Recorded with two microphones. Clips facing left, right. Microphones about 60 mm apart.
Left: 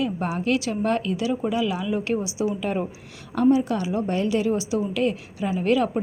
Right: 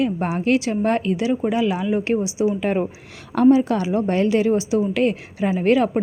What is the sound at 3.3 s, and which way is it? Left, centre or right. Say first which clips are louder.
A woman's voice: right 5 dB; right.